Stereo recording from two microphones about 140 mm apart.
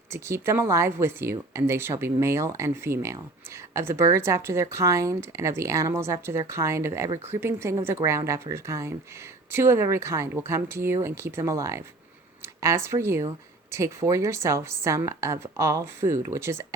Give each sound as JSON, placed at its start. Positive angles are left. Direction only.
{"t": 0.1, "sound": "speech", "side_deg": -20}